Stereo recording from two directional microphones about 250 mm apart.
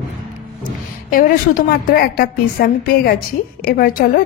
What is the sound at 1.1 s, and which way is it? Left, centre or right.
A woman's voice, left.